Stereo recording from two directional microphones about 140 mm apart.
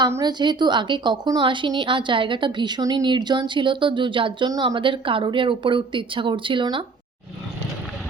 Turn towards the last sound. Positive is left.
turn(degrees=-35)  # may be behind; listen again after turning